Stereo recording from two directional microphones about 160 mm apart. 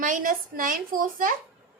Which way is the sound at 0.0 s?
55° right (ahead or behind).